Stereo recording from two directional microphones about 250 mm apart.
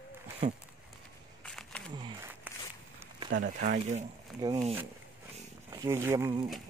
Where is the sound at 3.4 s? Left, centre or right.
Right.